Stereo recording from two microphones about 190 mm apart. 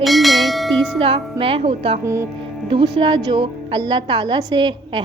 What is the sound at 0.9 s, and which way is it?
A woman's voice, 30° right (ahead or behind).